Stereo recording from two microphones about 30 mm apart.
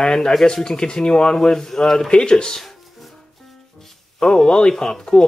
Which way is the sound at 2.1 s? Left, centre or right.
Left.